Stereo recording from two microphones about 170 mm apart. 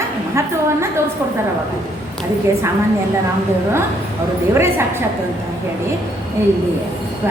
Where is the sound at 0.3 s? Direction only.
15° right (ahead or behind).